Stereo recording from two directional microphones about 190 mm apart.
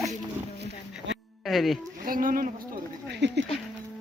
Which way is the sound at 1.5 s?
Centre (ahead or behind).